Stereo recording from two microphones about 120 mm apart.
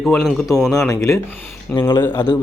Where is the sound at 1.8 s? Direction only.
20° left (ahead or behind).